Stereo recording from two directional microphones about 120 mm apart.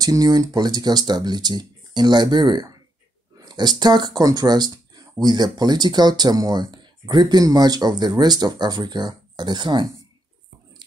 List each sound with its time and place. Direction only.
0.0 s speech: 30° right (ahead or behind)